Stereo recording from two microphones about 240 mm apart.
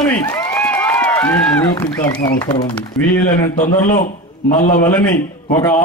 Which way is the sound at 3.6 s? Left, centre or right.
Left.